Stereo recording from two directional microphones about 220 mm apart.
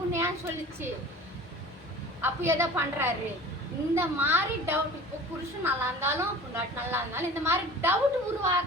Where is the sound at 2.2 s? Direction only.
10° right (ahead or behind).